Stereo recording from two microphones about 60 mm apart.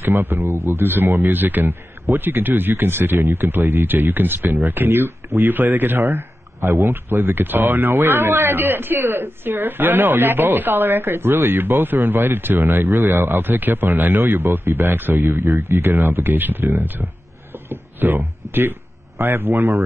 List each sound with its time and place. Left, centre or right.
0.0 s speech: right
3.2 s speech: right
3.4 s speech: right
15.3 s speech: right
15.9 s speech: right